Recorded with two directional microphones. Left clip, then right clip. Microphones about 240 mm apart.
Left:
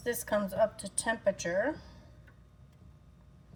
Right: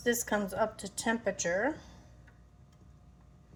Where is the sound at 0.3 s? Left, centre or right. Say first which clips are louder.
Left 3 dB; right.